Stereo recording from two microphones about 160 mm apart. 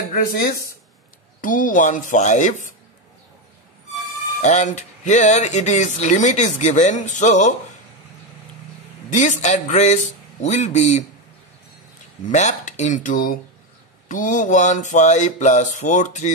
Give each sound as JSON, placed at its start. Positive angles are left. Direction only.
{"t": 1.4, "sound": "speech", "side_deg": 55}
{"t": 4.4, "sound": "speech", "side_deg": 45}
{"t": 9.1, "sound": "speech", "side_deg": 50}
{"t": 12.3, "sound": "speech", "side_deg": 45}